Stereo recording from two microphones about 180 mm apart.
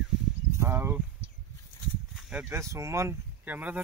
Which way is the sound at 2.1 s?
5° right (ahead or behind).